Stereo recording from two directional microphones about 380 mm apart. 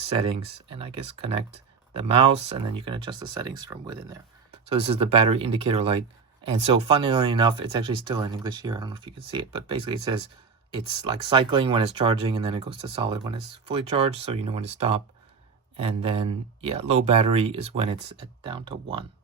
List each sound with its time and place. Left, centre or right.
0.0 s speech: centre